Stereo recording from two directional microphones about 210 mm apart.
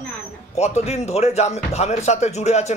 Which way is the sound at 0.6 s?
30° left (ahead or behind).